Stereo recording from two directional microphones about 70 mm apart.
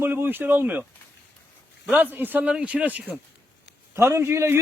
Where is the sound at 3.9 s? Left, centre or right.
Right.